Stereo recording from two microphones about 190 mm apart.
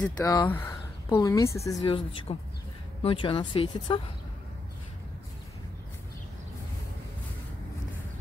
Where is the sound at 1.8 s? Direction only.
30° left (ahead or behind).